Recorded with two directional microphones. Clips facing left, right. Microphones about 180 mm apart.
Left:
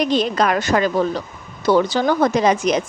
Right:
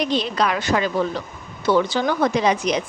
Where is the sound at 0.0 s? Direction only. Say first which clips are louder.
Left 3 dB; 45° left (ahead or behind).